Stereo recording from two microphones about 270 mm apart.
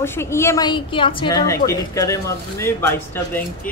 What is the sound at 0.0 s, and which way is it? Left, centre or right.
Speech, centre.